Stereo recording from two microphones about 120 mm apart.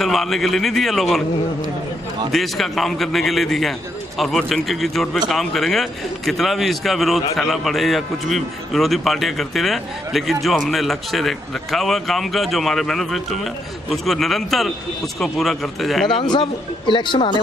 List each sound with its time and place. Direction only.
0.0 s a man's voice: centre (ahead or behind)
2.3 s a man's voice: centre (ahead or behind)
16.2 s speech: 40° left (ahead or behind)